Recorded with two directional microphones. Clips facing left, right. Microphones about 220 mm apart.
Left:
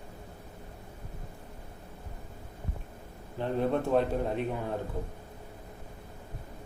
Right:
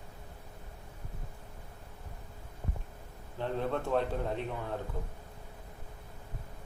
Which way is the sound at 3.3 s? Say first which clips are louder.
Left 5 dB; 15° left (ahead or behind).